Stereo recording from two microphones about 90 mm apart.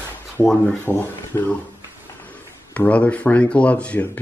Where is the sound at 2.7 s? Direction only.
15° left (ahead or behind).